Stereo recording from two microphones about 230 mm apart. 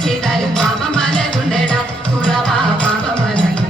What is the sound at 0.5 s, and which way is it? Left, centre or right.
Music, centre.